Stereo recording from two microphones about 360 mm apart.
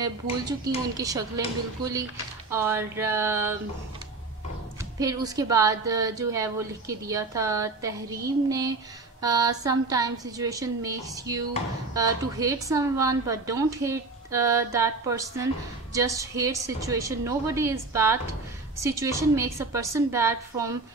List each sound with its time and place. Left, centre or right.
0.9 s a woman's voice: centre
2.5 s a woman's voice: centre
4.9 s a woman's voice: centre